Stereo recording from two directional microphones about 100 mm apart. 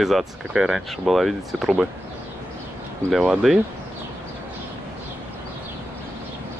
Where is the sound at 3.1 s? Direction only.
5° right (ahead or behind).